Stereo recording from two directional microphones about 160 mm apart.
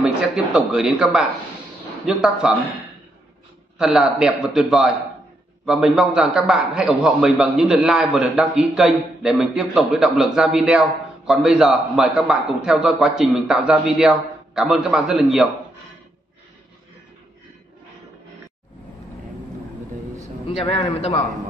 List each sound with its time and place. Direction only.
0.0 s a man's voice: 5° right (ahead or behind)
3.7 s a man's voice: 5° right (ahead or behind)
20.4 s a man's voice: 35° left (ahead or behind)